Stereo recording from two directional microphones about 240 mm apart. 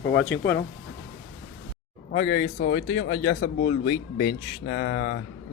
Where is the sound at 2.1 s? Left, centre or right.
Left.